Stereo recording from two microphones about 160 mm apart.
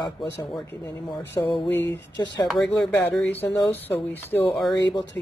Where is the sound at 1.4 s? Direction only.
20° left (ahead or behind).